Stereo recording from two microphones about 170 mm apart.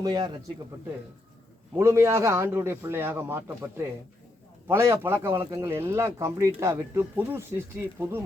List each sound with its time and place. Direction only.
0.0 s a man's voice: 25° right (ahead or behind)
1.7 s speech: 15° right (ahead or behind)